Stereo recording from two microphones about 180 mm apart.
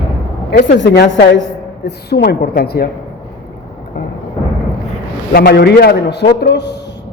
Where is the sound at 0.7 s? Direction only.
75° left (ahead or behind).